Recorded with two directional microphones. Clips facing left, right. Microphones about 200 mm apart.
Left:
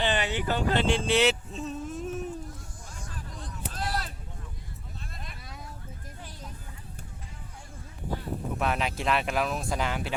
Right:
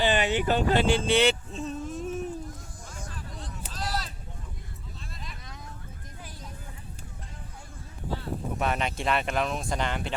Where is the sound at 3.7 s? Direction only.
55° left (ahead or behind).